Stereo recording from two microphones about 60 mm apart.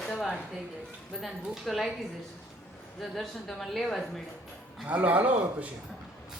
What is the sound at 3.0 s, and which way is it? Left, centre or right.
A woman's voice, centre.